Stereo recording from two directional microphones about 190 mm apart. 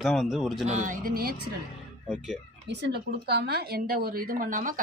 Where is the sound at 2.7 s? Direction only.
60° right (ahead or behind); by 4.8 s 45° right (ahead or behind).